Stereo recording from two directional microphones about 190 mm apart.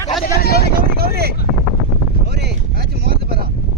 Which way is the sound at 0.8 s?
55° right (ahead or behind).